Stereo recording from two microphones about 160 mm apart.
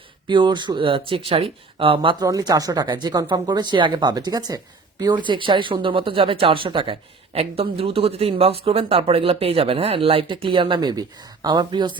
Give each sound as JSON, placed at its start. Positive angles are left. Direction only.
{"t": 0.3, "sound": "speech", "side_deg": -30}